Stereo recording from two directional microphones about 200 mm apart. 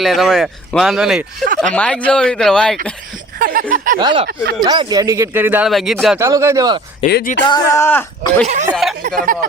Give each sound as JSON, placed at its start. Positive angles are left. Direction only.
{"t": 0.0, "sound": "speech", "side_deg": 0}
{"t": 3.3, "sound": "a sound", "side_deg": -45}
{"t": 4.0, "sound": "speech", "side_deg": -25}
{"t": 6.1, "sound": "speech", "side_deg": -15}
{"t": 7.1, "sound": "speech", "side_deg": 50}
{"t": 7.4, "sound": "speech", "side_deg": 20}
{"t": 8.7, "sound": "speech", "side_deg": 0}
{"t": 9.0, "sound": "speech", "side_deg": -40}